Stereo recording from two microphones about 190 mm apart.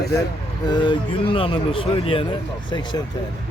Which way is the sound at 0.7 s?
25° left (ahead or behind).